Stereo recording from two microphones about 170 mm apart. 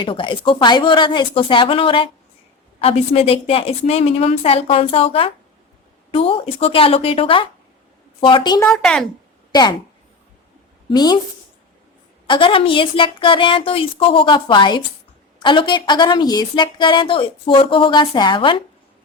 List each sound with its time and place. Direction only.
0.0 s a woman's voice: 30° left (ahead or behind)
8.7 s speech: centre (ahead or behind)
9.5 s speech: 25° left (ahead or behind)
10.8 s a woman's voice: 25° left (ahead or behind)
12.3 s a woman's voice: 30° left (ahead or behind)